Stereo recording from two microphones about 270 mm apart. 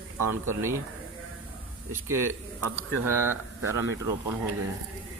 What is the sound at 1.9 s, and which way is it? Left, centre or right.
Speech, centre.